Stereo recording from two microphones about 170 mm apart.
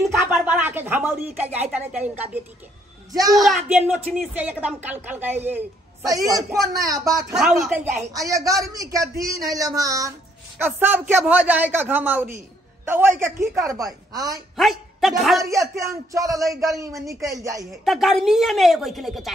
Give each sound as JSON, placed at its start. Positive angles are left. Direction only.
{"t": 0.3, "sound": "a sound", "side_deg": -10}
{"t": 1.7, "sound": "a man's voice", "side_deg": -10}
{"t": 3.1, "sound": "a child's voice", "side_deg": -20}
{"t": 3.3, "sound": "a woman's voice", "side_deg": 0}
{"t": 7.3, "sound": "a woman's voice", "side_deg": 0}
{"t": 8.2, "sound": "a man's voice", "side_deg": -20}
{"t": 14.6, "sound": "speech", "side_deg": 0}
{"t": 15.5, "sound": "a man's voice", "side_deg": -20}
{"t": 17.8, "sound": "a woman's voice", "side_deg": 0}